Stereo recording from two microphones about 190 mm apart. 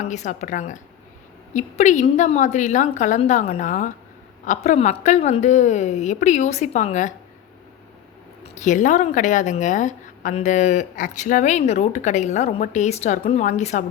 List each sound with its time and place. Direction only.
0.0 s a woman's voice: 40° left (ahead or behind)
8.5 s a woman's voice: 40° left (ahead or behind)